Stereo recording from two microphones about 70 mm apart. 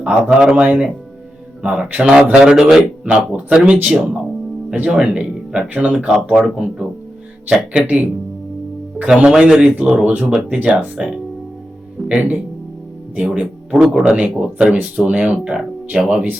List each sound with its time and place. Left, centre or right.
0.0 s speech: centre
7.4 s speech: centre
9.0 s speech: centre
14.0 s speech: centre